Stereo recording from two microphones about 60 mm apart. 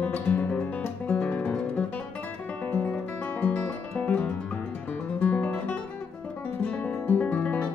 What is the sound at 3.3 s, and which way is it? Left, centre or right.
Music, left.